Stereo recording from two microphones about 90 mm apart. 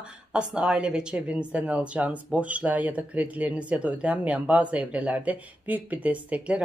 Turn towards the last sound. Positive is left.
turn(degrees=-15)  # may be behind; listen again after turning